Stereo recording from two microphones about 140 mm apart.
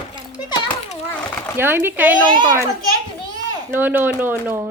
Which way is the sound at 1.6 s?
15° right (ahead or behind).